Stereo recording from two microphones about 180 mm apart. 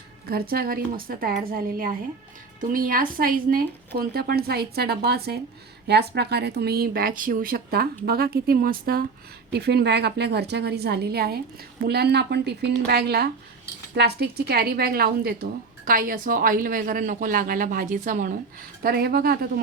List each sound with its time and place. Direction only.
0.3 s a woman's voice: 60° right (ahead or behind)
9.5 s a woman's voice: 65° right (ahead or behind)